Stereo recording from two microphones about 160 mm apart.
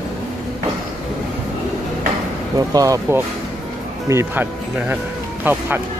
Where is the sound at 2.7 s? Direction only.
20° right (ahead or behind).